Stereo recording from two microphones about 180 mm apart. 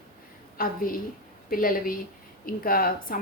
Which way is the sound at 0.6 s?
55° left (ahead or behind).